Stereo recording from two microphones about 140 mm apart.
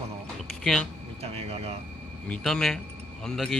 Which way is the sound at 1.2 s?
45° right (ahead or behind).